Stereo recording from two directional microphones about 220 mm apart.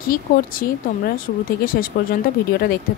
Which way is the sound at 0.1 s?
40° left (ahead or behind).